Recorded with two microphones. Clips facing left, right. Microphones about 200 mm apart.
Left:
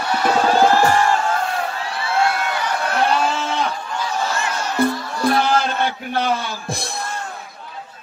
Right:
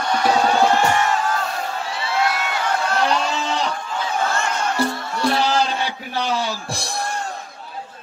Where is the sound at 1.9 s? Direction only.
55° left (ahead or behind).